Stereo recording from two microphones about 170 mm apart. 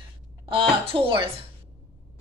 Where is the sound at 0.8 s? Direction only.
30° right (ahead or behind).